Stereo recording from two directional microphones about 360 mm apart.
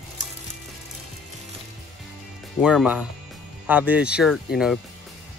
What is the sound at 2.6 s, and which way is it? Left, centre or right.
Speech, centre.